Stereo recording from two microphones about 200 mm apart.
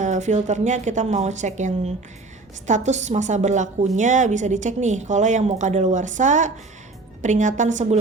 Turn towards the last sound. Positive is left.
turn(degrees=-40)  # may be behind; listen again after turning